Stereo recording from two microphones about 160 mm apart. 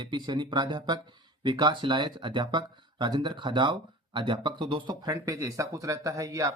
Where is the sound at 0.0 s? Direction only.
30° right (ahead or behind).